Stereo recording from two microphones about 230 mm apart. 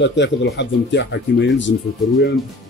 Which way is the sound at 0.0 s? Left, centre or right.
Left.